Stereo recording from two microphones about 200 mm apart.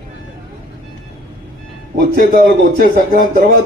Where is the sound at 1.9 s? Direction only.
45° right (ahead or behind).